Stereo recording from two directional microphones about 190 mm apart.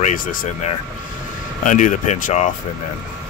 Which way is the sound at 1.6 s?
40° left (ahead or behind).